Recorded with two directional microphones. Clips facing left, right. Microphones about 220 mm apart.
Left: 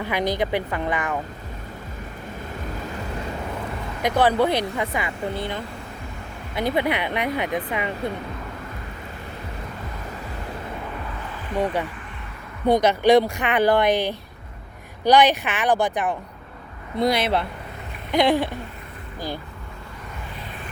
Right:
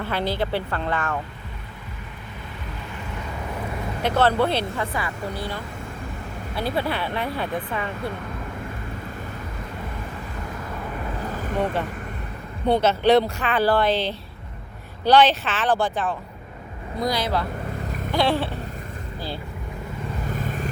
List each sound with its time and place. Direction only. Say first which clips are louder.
0.0 s speech: left 2 dB; 15° left (ahead or behind)
4.0 s speech: left 1 dB; 15° left (ahead or behind)
11.5 s speech: left 2 dB; 15° left (ahead or behind)
18.1 s a sound: left 3 dB; 15° left (ahead or behind)
20.3 s vehicle: right 8 dB; 45° right (ahead or behind)